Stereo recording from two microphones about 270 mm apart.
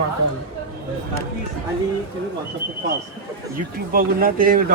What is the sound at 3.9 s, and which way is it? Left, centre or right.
Speech, right.